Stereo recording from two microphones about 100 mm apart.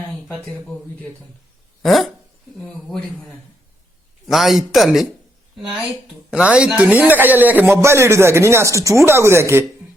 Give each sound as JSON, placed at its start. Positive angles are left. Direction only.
{"t": 1.8, "sound": "speech", "side_deg": 0}
{"t": 4.3, "sound": "speech", "side_deg": 0}
{"t": 6.3, "sound": "a man's voice", "side_deg": -10}